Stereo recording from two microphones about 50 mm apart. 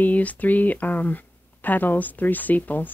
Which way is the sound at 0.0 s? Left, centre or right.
Left.